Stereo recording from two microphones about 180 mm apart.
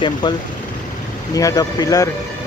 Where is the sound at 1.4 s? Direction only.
20° left (ahead or behind).